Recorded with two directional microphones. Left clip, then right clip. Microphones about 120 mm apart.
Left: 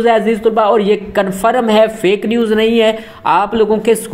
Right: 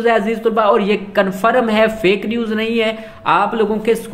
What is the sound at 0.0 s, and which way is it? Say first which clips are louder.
Speech: left 3 dB; 25° left (ahead or behind).